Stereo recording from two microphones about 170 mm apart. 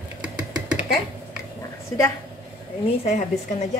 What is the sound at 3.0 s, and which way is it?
Speech, 40° left (ahead or behind).